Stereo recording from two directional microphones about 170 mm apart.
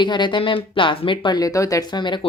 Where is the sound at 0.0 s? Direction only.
25° left (ahead or behind).